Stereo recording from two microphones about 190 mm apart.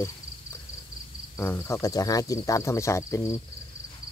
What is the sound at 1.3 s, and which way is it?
Speech, 15° left (ahead or behind).